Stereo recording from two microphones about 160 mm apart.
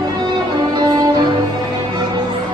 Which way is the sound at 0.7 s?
25° right (ahead or behind).